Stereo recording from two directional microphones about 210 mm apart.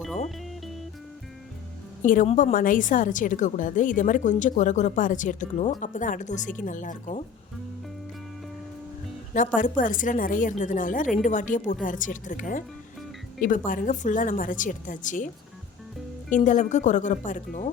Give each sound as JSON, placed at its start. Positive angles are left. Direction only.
{"t": 2.0, "sound": "a woman's voice", "side_deg": 35}
{"t": 9.6, "sound": "a woman's voice", "side_deg": 40}
{"t": 13.7, "sound": "a woman's voice", "side_deg": 40}
{"t": 16.3, "sound": "a woman's voice", "side_deg": 35}